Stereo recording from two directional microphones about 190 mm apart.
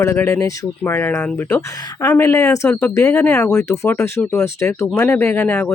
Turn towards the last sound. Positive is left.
turn(degrees=15)  # may be behind; listen again after turning